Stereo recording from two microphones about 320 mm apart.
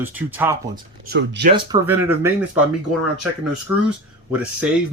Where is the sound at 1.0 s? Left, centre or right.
Right.